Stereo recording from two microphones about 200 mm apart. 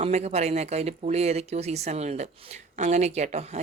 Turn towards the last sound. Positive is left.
turn(degrees=-35)  # may be behind; listen again after turning